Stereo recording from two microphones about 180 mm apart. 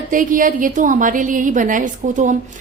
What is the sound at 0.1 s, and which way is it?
A woman's voice, 50° right (ahead or behind).